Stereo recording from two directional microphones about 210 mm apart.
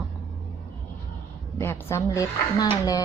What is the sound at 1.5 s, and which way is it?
A woman's voice, 10° left (ahead or behind).